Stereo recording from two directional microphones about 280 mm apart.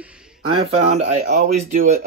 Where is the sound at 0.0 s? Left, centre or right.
Centre.